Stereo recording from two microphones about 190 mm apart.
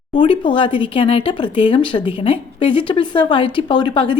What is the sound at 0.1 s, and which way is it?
Speech, 25° left (ahead or behind).